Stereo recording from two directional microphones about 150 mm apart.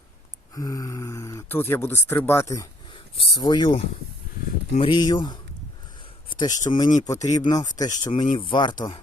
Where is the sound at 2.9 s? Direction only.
35° left (ahead or behind).